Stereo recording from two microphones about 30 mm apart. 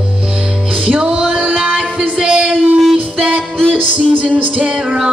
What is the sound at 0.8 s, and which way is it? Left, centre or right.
Music, right.